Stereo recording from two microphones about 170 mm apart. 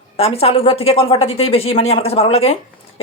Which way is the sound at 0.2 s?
35° left (ahead or behind).